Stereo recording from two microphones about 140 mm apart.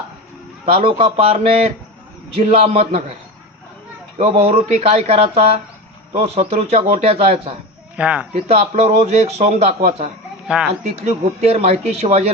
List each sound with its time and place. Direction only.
0.6 s a man's voice: 40° right (ahead or behind)
4.2 s a man's voice: 45° right (ahead or behind)
7.9 s speech: 10° right (ahead or behind)
8.4 s a man's voice: 50° right (ahead or behind)
10.4 s speech: 5° right (ahead or behind)
10.8 s a man's voice: 55° right (ahead or behind)